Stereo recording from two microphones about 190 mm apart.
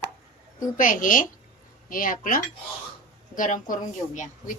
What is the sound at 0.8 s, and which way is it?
A woman's voice, 45° left (ahead or behind).